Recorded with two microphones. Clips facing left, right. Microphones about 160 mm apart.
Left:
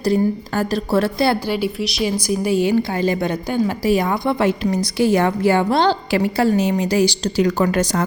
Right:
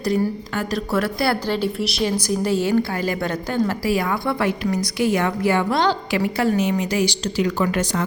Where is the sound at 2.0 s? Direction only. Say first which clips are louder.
Left 2 dB; 10° left (ahead or behind); by 8.0 s 40° left (ahead or behind).